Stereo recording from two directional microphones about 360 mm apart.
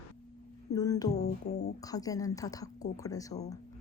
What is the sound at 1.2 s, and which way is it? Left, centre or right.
Music, left.